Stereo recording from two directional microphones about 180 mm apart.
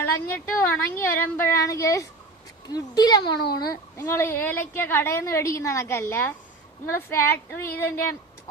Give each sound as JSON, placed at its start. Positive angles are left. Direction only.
{"t": 0.0, "sound": "a woman's voice", "side_deg": 10}